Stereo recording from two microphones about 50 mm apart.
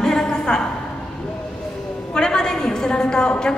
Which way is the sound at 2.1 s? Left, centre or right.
Centre.